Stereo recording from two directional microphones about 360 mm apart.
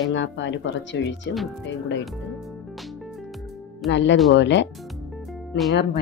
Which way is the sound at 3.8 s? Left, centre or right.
Left.